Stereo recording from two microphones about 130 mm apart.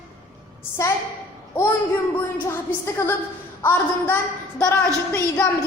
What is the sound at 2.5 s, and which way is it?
A woman's voice, 20° left (ahead or behind).